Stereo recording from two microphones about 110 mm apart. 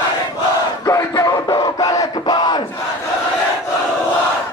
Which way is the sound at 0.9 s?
30° left (ahead or behind).